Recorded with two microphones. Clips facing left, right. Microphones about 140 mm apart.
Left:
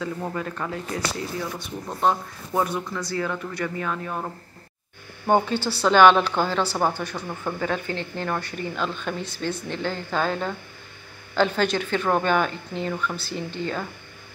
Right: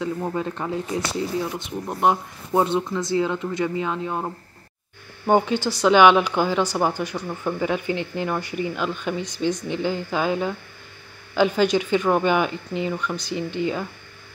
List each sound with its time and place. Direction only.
0.0 s speech: 20° right (ahead or behind)